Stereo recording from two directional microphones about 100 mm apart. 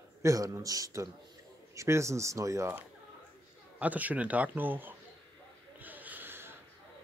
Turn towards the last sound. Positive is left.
turn(degrees=-25)  # may be behind; listen again after turning